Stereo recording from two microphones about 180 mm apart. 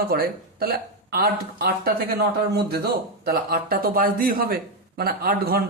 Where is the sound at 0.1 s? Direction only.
55° right (ahead or behind).